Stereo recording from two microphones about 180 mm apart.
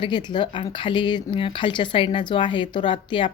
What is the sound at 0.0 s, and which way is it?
A woman's voice, 25° left (ahead or behind).